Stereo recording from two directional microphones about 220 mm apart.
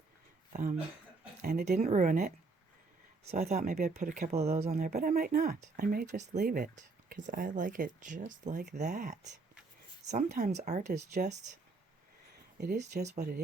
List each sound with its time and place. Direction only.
0.5 s speech: 35° right (ahead or behind)
3.3 s speech: 40° right (ahead or behind)
10.3 s speech: 30° right (ahead or behind)
12.5 s speech: 50° right (ahead or behind)